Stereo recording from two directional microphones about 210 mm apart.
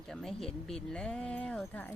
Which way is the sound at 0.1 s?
Centre (ahead or behind).